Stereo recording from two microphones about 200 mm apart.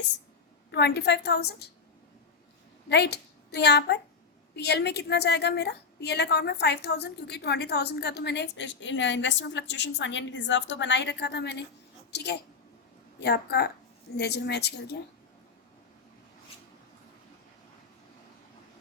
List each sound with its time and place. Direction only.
0.7 s a woman's voice: 55° left (ahead or behind)
2.9 s a woman's voice: 55° left (ahead or behind)